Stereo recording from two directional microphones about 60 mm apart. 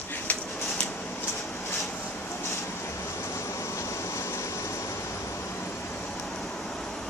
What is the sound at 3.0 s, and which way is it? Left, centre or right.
Train, left.